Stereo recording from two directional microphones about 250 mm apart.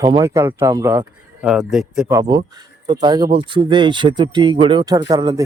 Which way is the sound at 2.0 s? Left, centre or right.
Centre.